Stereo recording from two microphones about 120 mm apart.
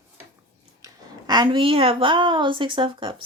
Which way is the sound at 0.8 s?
35° right (ahead or behind).